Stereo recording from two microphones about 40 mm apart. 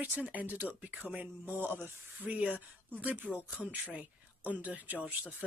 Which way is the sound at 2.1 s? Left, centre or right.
Right.